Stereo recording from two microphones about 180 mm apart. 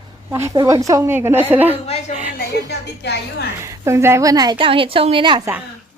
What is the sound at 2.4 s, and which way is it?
A woman's voice, 70° left (ahead or behind).